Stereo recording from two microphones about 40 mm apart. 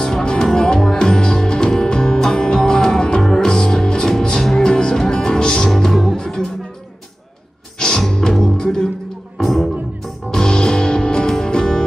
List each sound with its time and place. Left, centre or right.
0.0 s music: centre
5.9 s music: centre
8.1 s music: centre